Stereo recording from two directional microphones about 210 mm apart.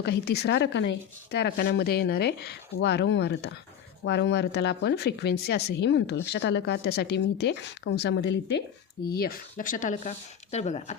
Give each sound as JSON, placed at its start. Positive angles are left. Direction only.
{"t": 0.0, "sound": "speech", "side_deg": 50}